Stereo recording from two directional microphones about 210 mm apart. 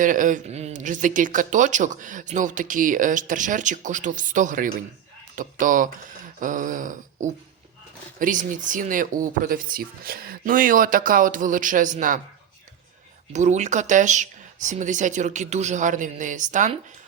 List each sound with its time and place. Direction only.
0.0 s speech: 40° right (ahead or behind)
13.3 s speech: 35° right (ahead or behind)